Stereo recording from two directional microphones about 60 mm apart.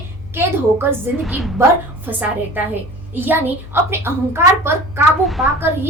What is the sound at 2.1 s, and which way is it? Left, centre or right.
A woman's voice, right.